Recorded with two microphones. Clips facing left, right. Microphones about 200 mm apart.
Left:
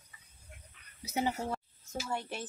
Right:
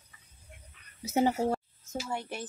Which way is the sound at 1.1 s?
45° right (ahead or behind).